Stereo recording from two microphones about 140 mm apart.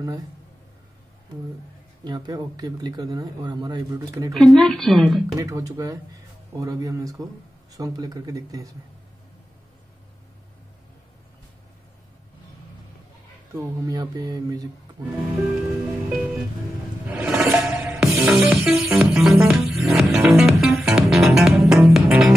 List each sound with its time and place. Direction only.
2.0 s speech: 30° right (ahead or behind)
4.4 s speech: 5° left (ahead or behind)
5.3 s speech: 25° right (ahead or behind)
13.6 s speech: 25° right (ahead or behind)
15.8 s music: 10° right (ahead or behind)